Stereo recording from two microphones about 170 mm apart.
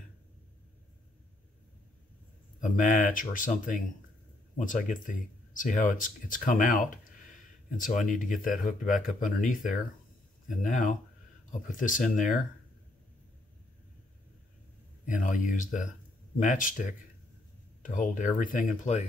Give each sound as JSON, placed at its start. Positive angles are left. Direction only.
{"t": 2.6, "sound": "speech", "side_deg": 50}
{"t": 15.0, "sound": "speech", "side_deg": 50}